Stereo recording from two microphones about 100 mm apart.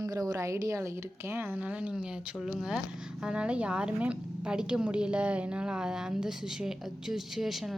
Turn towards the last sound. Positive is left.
turn(degrees=0)  # may be behind; listen again after turning